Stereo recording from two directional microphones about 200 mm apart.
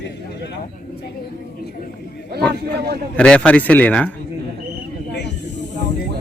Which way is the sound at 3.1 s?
5° left (ahead or behind).